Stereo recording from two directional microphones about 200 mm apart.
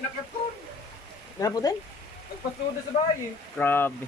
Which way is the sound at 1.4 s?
20° left (ahead or behind).